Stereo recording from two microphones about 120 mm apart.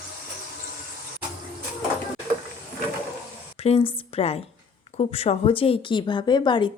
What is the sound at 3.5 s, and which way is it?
A woman's voice, 55° left (ahead or behind).